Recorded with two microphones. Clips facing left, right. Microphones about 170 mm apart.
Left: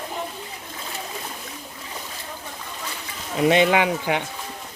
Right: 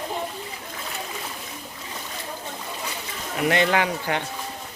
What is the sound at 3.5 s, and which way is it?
Speech, 15° left (ahead or behind).